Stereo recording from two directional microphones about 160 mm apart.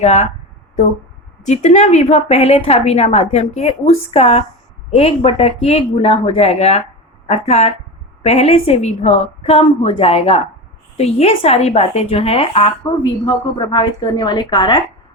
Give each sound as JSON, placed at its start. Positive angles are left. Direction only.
{"t": 0.0, "sound": "speech", "side_deg": 45}
{"t": 1.5, "sound": "speech", "side_deg": 45}